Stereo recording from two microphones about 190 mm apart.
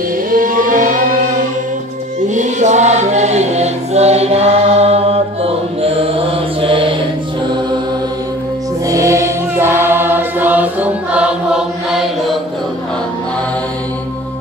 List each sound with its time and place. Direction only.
0.3 s chant: 45° right (ahead or behind)
2.2 s chant: 40° right (ahead or behind)
8.8 s music: 15° right (ahead or behind)